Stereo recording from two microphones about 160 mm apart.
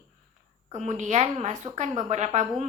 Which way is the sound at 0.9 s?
45° right (ahead or behind).